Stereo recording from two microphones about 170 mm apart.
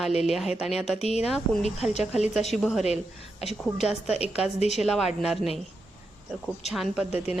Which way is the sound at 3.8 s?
5° right (ahead or behind).